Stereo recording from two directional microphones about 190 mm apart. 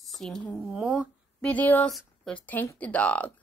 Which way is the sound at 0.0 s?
Centre (ahead or behind).